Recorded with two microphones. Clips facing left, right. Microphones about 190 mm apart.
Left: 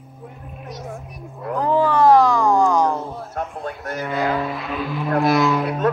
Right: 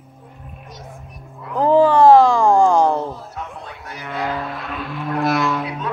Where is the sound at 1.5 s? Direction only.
30° right (ahead or behind).